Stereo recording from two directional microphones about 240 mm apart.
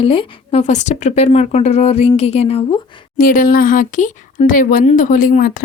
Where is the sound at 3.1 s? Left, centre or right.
Left.